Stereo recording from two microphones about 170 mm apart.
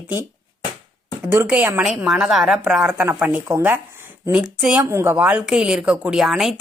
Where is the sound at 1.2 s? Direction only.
10° right (ahead or behind).